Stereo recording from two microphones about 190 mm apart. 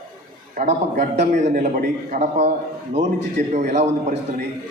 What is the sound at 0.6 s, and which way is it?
A man's voice, 40° right (ahead or behind).